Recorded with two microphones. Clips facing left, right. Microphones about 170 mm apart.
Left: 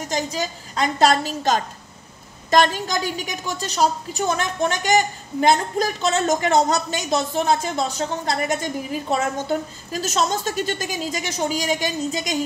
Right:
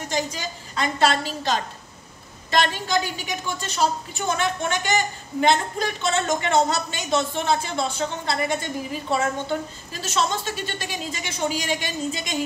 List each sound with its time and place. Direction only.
0.1 s a woman's voice: 40° left (ahead or behind)